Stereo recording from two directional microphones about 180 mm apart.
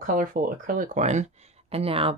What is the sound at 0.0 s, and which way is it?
Speech, 50° right (ahead or behind).